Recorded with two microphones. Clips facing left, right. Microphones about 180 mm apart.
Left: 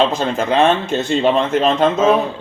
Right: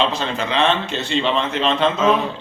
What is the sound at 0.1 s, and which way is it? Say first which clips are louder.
Speech: left 5 dB; 45° left (ahead or behind).